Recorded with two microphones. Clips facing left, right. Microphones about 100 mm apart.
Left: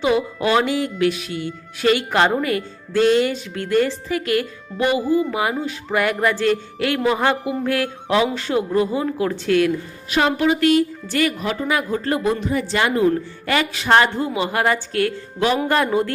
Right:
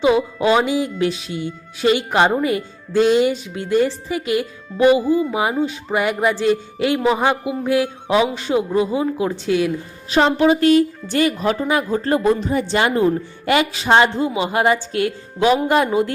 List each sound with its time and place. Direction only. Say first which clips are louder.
0.0 s a woman's voice: right 3 dB; 20° right (ahead or behind)
10.1 s a woman's voice: right 3 dB; 30° right (ahead or behind)